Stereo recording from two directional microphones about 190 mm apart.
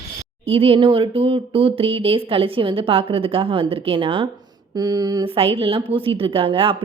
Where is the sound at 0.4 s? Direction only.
30° right (ahead or behind).